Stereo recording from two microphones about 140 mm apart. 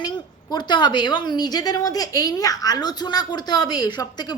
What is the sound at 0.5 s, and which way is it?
A woman's voice, 30° left (ahead or behind).